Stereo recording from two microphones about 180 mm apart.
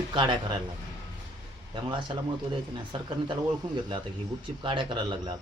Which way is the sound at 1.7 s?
25° right (ahead or behind).